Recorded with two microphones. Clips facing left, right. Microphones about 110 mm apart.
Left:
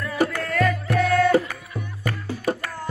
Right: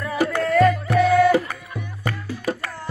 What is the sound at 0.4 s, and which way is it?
Music, centre (ahead or behind).